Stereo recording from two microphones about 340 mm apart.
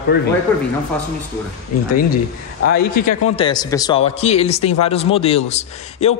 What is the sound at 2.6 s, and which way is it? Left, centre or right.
Speech, left.